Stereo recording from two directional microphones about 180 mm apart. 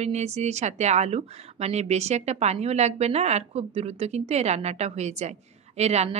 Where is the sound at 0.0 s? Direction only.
35° right (ahead or behind).